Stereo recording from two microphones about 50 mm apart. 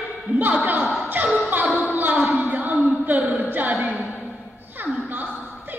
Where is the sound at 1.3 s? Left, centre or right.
Right.